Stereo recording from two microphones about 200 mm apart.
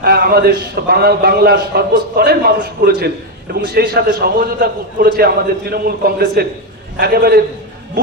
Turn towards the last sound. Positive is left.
turn(degrees=-50)  # may be behind; listen again after turning